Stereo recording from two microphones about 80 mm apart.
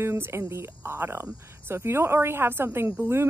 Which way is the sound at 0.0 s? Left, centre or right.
Right.